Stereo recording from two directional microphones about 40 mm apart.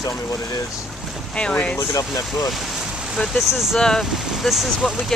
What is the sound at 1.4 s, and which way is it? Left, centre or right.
Speech, left.